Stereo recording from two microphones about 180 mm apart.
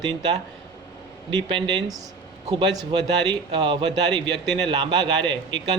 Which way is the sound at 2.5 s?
20° right (ahead or behind).